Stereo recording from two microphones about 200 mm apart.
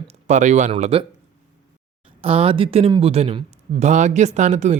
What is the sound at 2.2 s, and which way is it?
Speech, 25° right (ahead or behind).